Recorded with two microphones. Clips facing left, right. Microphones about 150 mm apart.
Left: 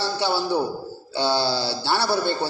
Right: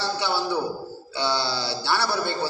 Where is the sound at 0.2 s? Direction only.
30° left (ahead or behind).